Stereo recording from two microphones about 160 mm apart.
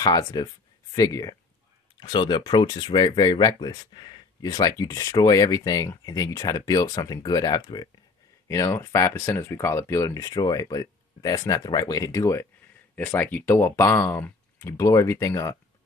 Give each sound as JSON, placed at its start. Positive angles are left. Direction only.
{"t": 0.0, "sound": "speech", "side_deg": 25}